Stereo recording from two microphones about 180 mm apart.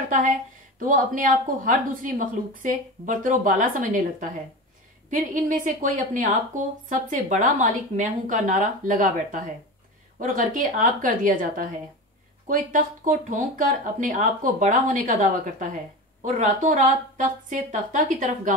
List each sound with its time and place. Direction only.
0.7 s a woman's voice: 50° right (ahead or behind)